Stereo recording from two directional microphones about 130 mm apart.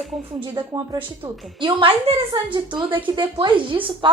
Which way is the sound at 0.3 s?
40° right (ahead or behind).